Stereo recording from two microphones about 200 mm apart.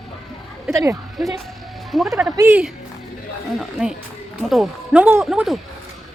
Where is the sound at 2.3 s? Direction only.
15° right (ahead or behind).